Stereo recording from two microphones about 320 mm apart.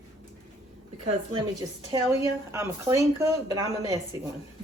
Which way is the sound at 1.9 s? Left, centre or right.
Centre.